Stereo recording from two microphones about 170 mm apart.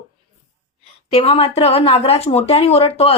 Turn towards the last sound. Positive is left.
turn(degrees=35)  # may be behind; listen again after turning